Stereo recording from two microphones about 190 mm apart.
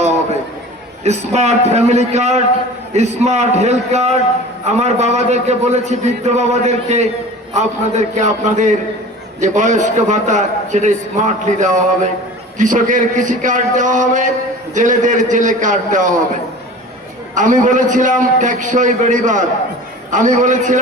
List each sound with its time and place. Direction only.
1.0 s a man's voice: 35° right (ahead or behind)
17.3 s a man's voice: 40° right (ahead or behind)